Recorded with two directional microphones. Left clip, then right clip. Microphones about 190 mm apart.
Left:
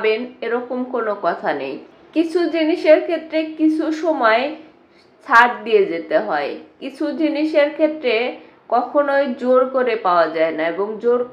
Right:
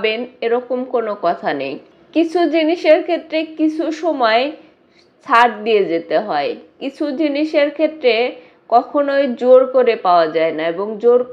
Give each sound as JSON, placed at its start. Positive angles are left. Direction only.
{"t": 0.0, "sound": "a woman's voice", "side_deg": -30}